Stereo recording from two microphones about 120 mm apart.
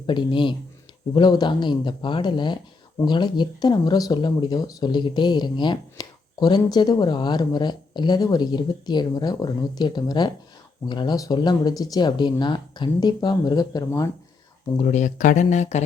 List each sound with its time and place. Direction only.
0.0 s speech: 40° left (ahead or behind)
14.8 s speech: 75° left (ahead or behind)